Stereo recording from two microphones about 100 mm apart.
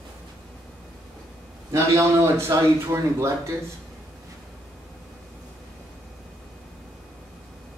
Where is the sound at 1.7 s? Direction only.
30° right (ahead or behind).